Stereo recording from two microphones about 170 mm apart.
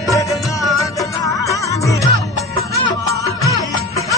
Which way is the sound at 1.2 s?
20° left (ahead or behind).